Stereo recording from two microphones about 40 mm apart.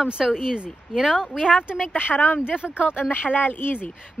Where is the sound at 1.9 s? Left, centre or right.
Left.